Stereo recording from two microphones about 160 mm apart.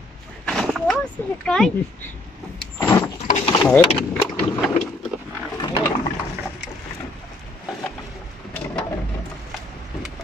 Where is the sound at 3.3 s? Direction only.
35° left (ahead or behind).